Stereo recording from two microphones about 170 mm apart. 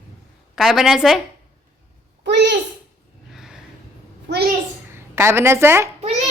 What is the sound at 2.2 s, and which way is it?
Speech, 90° right.